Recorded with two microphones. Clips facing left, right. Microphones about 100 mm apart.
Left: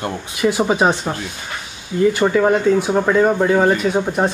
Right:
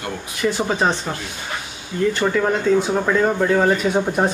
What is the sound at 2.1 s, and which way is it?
Speech, 10° left (ahead or behind).